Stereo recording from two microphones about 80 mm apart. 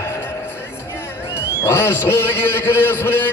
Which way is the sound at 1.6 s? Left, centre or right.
Left.